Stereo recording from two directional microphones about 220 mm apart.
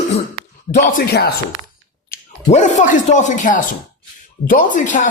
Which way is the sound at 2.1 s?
35° left (ahead or behind).